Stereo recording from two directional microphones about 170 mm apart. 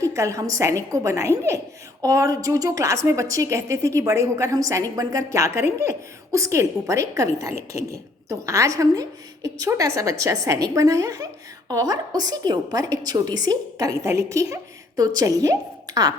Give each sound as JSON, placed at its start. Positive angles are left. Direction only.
{"t": 0.0, "sound": "a woman's voice", "side_deg": -20}